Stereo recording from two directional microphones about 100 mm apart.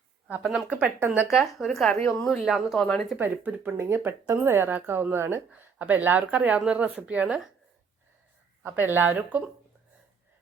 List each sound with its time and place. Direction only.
0.7 s speech: 15° right (ahead or behind)
1.3 s speech: centre (ahead or behind)
2.8 s speech: 10° left (ahead or behind)
3.2 s speech: 20° right (ahead or behind)
8.6 s speech: 20° right (ahead or behind)